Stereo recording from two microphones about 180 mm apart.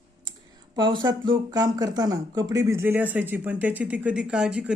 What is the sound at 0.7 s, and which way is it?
Speech, 25° right (ahead or behind).